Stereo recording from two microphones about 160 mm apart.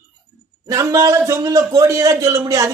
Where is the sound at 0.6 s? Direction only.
20° right (ahead or behind).